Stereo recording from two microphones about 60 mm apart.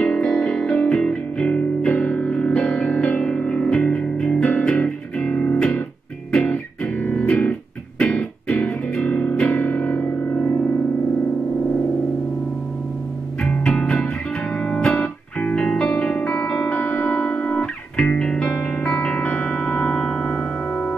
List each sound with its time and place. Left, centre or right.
0.0 s music: centre
7.0 s music: left
13.4 s music: centre
19.7 s a sound: centre